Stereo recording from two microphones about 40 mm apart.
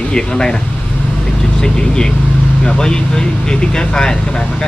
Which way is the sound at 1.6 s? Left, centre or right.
Centre.